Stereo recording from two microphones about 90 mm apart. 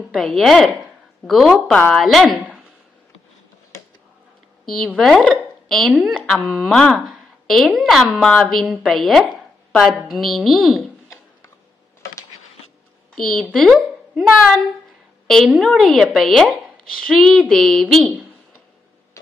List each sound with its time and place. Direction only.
0.1 s a woman's voice: 5° left (ahead or behind)
1.7 s speech: 15° left (ahead or behind)
2.0 s a woman's voice: centre (ahead or behind)
4.9 s a woman's voice: 5° left (ahead or behind)
9.7 s a sound: 5° left (ahead or behind)
10.0 s a woman's voice: centre (ahead or behind)
13.1 s a woman's voice: 5° left (ahead or behind)